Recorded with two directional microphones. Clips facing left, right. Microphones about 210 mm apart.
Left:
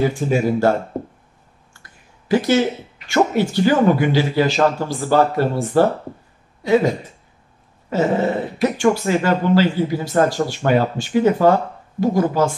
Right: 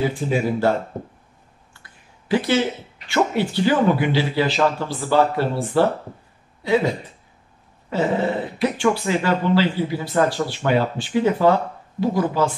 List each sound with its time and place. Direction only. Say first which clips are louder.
0.0 s speech: left 3 dB; 45° left (ahead or behind)
1.7 s a sound: left 2 dB; 45° left (ahead or behind)
3.1 s speech: left 3 dB; 45° left (ahead or behind)
7.9 s speech: left 3 dB; 45° left (ahead or behind)